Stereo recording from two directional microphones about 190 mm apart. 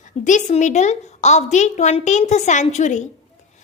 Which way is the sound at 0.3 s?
40° left (ahead or behind).